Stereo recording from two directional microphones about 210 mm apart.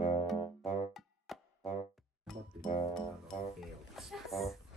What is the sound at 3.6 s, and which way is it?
Music, centre (ahead or behind).